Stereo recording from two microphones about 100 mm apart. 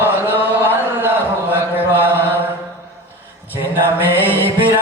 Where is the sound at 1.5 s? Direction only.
20° right (ahead or behind).